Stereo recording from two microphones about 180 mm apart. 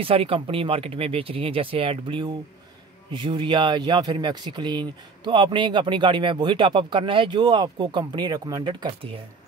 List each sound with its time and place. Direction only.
0.0 s speech: 30° right (ahead or behind)